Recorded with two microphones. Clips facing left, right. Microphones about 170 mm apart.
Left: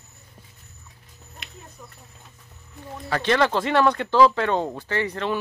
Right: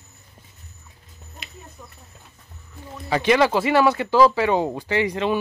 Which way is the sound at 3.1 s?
10° right (ahead or behind).